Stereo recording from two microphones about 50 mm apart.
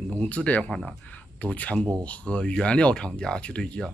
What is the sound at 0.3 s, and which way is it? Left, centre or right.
Speech, left.